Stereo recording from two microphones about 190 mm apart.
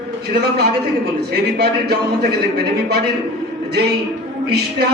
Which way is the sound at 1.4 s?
60° right (ahead or behind).